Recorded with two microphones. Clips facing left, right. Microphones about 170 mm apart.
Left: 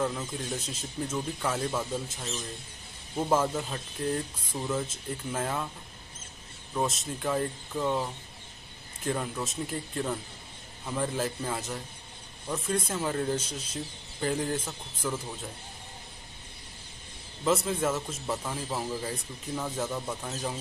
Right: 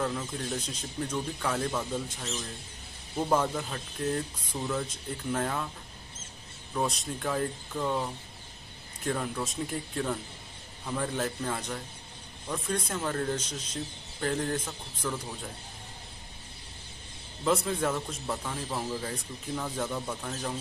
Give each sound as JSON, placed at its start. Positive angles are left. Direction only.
{"t": 0.0, "sound": "speech", "side_deg": 5}
{"t": 6.7, "sound": "a man's voice", "side_deg": 0}
{"t": 17.5, "sound": "a man's voice", "side_deg": 0}